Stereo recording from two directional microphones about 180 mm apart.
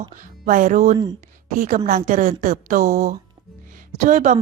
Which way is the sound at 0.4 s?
45° right (ahead or behind).